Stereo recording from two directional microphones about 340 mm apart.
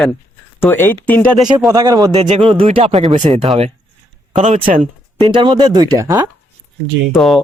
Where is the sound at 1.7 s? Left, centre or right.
Centre.